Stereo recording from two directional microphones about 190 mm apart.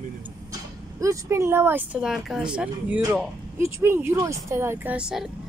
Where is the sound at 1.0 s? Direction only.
15° right (ahead or behind).